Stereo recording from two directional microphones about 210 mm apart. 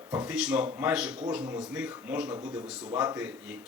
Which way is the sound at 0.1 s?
5° right (ahead or behind).